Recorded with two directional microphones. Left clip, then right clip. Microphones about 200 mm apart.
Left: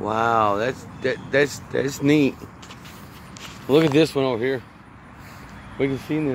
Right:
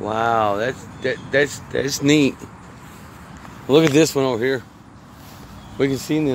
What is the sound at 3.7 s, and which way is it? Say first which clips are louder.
Speech: right 3 dB; 5° right (ahead or behind).